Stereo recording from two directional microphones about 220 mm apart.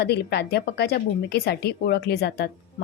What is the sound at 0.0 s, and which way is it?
Speech, 50° left (ahead or behind).